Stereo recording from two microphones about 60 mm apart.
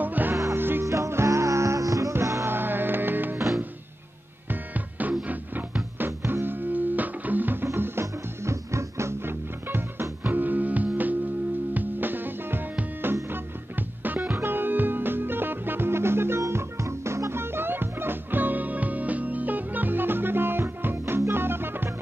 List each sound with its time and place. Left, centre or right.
0.0 s music: right
0.8 s music: right
2.4 s music: right
4.5 s music: right
7.6 s music: right